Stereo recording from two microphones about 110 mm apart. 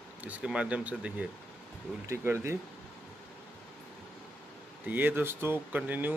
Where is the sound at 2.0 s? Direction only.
25° right (ahead or behind).